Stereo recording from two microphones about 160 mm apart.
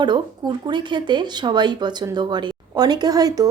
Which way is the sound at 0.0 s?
30° right (ahead or behind).